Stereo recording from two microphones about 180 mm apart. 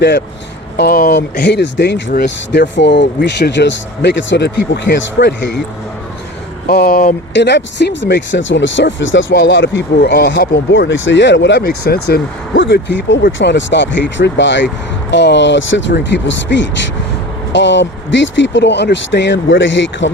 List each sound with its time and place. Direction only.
0.8 s speech: 55° left (ahead or behind); by 5.6 s 75° left (ahead or behind)
6.7 s speech: 60° left (ahead or behind)
7.3 s speech: 75° left (ahead or behind)
13.2 s speech: 75° left (ahead or behind); by 14.7 s 90° left
15.1 s speech: 75° left (ahead or behind)